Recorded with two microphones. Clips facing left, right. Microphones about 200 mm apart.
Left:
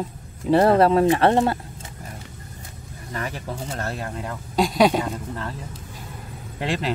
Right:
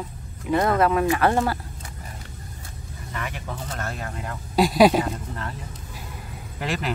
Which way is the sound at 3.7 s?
35° left (ahead or behind).